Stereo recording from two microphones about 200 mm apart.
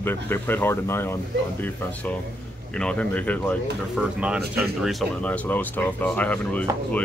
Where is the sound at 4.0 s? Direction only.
5° right (ahead or behind).